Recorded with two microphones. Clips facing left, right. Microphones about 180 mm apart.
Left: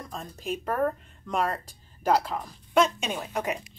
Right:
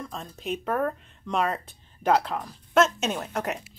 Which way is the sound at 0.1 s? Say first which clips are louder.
Left 3 dB; centre (ahead or behind).